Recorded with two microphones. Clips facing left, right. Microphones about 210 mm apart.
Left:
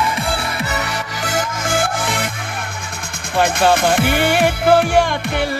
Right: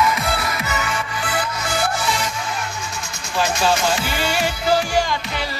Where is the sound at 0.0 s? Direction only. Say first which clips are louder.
Even; 30° left (ahead or behind); by 2.3 s 55° left (ahead or behind).